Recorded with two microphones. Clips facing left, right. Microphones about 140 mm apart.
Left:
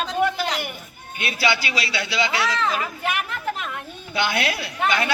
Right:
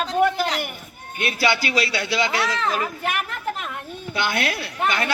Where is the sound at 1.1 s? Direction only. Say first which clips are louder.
Right 1 dB; 50° right (ahead or behind).